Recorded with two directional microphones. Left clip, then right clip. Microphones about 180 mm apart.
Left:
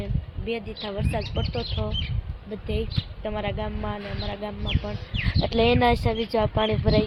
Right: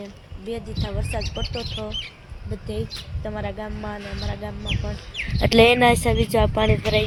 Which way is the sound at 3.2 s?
Centre (ahead or behind).